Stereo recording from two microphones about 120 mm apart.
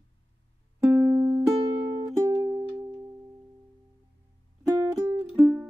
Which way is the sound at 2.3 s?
25° right (ahead or behind).